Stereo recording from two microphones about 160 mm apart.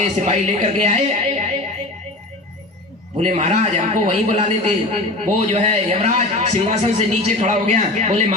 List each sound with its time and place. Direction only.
0.0 s a man's voice: 50° right (ahead or behind)
3.2 s a man's voice: 45° right (ahead or behind)